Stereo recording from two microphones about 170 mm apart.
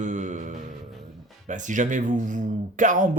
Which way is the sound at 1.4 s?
45° right (ahead or behind).